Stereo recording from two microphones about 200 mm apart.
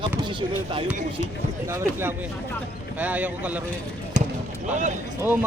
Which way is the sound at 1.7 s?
10° right (ahead or behind).